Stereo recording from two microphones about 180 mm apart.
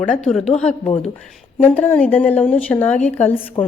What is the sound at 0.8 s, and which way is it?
Speech, 40° left (ahead or behind).